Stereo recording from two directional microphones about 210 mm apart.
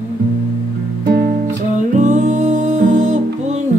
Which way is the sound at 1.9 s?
35° right (ahead or behind).